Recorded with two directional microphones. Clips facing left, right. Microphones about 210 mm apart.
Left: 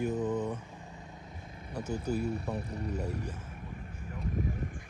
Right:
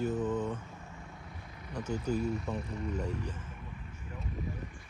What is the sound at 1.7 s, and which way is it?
Speech, 10° left (ahead or behind).